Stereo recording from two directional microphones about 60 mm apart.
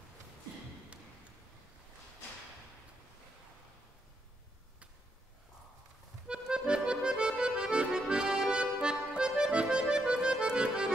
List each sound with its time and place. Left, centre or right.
6.2 s accordion: centre